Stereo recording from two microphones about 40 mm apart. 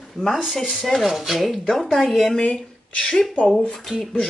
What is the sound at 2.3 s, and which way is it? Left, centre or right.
Speech, left.